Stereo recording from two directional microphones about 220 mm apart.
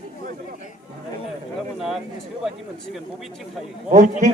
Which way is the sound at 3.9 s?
35° right (ahead or behind).